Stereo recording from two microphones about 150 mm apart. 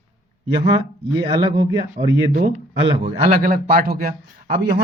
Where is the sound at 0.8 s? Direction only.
30° right (ahead or behind).